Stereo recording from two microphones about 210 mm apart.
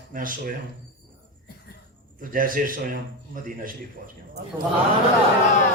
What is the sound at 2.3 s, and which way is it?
A man's voice, 40° right (ahead or behind).